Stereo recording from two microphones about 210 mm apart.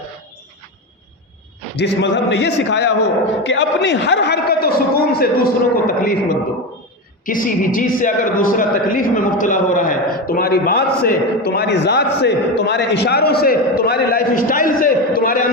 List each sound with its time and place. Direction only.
1.7 s a man's voice: 55° left (ahead or behind)
7.3 s a man's voice: 40° left (ahead or behind)